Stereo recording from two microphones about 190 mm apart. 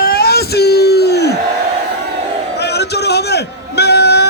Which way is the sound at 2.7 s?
60° left (ahead or behind).